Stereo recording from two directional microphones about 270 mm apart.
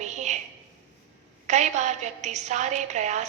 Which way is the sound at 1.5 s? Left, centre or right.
Right.